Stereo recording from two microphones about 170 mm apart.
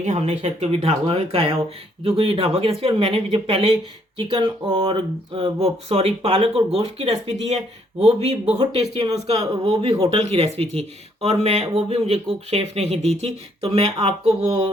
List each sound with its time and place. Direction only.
0.0 s speech: 40° right (ahead or behind)